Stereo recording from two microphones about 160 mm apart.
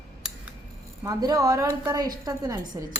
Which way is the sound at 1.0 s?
25° right (ahead or behind).